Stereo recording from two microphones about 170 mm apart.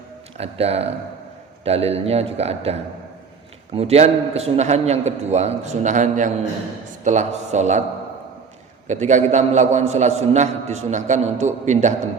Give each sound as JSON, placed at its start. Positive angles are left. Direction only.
{"t": 0.3, "sound": "a man's voice", "side_deg": -35}
{"t": 3.8, "sound": "a man's voice", "side_deg": -40}
{"t": 8.9, "sound": "a man's voice", "side_deg": -45}